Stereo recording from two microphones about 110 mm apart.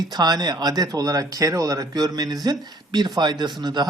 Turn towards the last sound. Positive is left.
turn(degrees=-40)  # may be behind; listen again after turning